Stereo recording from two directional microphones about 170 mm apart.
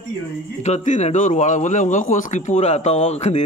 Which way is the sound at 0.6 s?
45° left (ahead or behind).